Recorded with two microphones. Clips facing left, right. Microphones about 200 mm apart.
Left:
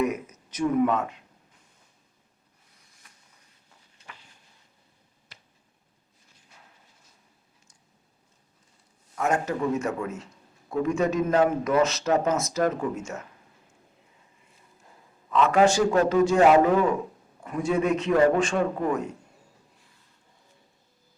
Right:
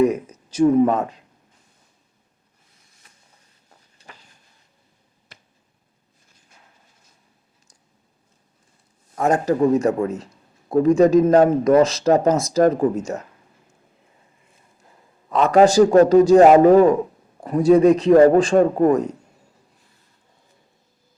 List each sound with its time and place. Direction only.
0.0 s speech: 30° right (ahead or behind)
3.9 s a sound: 40° right (ahead or behind)
5.3 s finger snapping: 50° right (ahead or behind)
9.1 s speech: 35° right (ahead or behind)
15.3 s speech: 40° right (ahead or behind)